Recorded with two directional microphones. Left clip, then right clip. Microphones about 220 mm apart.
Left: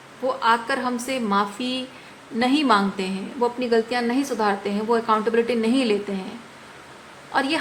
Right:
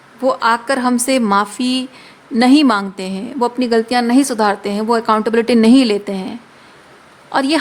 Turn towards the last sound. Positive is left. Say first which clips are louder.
# right 7 dB
turn(degrees=-50)  # may be behind; listen again after turning